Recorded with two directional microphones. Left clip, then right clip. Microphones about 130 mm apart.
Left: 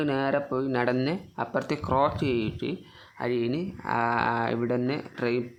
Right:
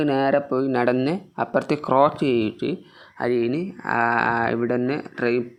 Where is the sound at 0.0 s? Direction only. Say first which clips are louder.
Right 6 dB; 35° right (ahead or behind).